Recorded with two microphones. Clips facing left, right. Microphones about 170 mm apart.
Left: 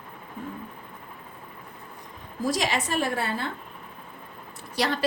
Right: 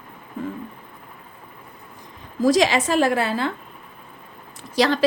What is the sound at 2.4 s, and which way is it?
A woman's voice, 90° right.